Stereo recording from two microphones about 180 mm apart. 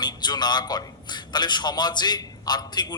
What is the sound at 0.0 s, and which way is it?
A man's voice, 25° left (ahead or behind).